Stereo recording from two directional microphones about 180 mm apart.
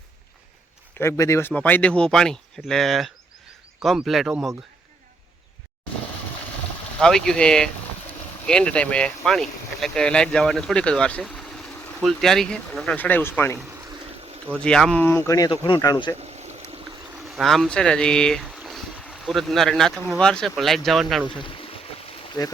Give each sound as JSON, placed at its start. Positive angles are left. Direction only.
{"t": 0.9, "sound": "speech", "side_deg": 15}
{"t": 7.0, "sound": "speech", "side_deg": 5}
{"t": 14.6, "sound": "speech", "side_deg": 5}
{"t": 15.0, "sound": "speech", "side_deg": 15}
{"t": 17.3, "sound": "speech", "side_deg": 0}
{"t": 21.2, "sound": "boat", "side_deg": 25}
{"t": 22.4, "sound": "speech", "side_deg": 20}